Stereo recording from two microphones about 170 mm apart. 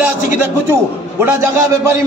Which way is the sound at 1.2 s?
15° right (ahead or behind).